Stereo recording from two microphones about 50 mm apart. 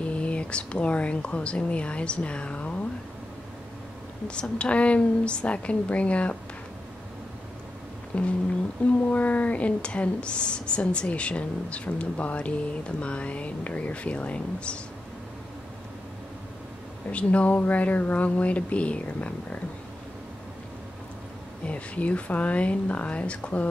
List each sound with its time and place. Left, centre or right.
0.0 s speech: left
4.3 s speech: left
8.1 s speech: left
17.1 s speech: left
21.6 s speech: left